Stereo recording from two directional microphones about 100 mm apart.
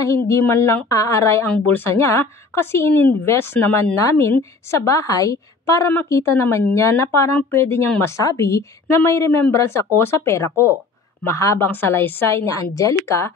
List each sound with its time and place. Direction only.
0.0 s a woman's voice: 30° left (ahead or behind)
12.4 s a woman's voice: 35° left (ahead or behind)